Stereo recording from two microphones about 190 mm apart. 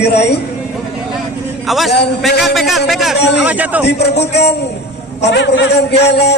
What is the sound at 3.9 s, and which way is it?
A man's voice, 60° left (ahead or behind).